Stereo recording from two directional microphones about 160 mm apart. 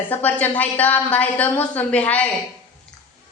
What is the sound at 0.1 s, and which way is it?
A woman's voice, 10° left (ahead or behind).